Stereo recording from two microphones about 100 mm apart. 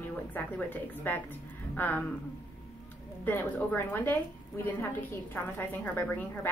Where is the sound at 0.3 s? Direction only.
20° left (ahead or behind).